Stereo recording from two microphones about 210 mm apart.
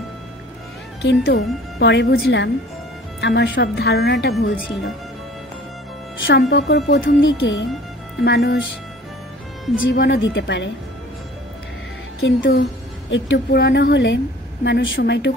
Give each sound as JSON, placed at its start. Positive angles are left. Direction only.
{"t": 1.0, "sound": "a woman's voice", "side_deg": 50}
{"t": 6.2, "sound": "a woman's voice", "side_deg": 55}
{"t": 9.8, "sound": "a woman's voice", "side_deg": 55}
{"t": 12.2, "sound": "a woman's voice", "side_deg": 60}